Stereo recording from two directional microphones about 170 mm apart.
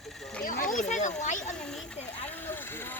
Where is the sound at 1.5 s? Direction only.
5° left (ahead or behind).